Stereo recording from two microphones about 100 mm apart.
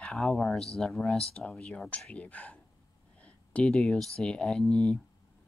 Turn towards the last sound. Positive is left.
turn(degrees=10)  # may be behind; listen again after turning